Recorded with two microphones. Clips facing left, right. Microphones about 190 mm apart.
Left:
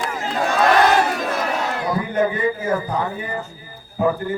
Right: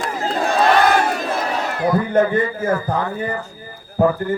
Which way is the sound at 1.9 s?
50° right (ahead or behind).